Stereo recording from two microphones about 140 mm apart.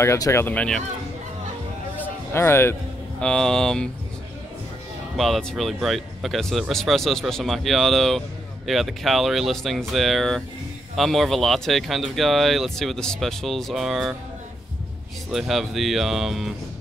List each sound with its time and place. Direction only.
0.0 s speech: 20° left (ahead or behind)
2.0 s a sound: 15° left (ahead or behind)
3.2 s speech: 5° left (ahead or behind)
5.1 s speech: centre (ahead or behind)
15.3 s speech: centre (ahead or behind)